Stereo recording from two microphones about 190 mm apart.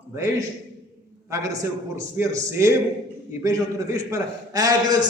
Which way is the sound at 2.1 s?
15° right (ahead or behind).